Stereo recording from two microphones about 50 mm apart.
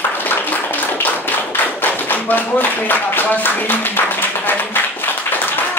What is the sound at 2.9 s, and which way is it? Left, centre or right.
Speech, left.